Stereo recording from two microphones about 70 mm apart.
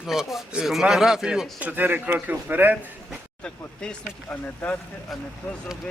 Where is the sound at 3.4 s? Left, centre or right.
Centre.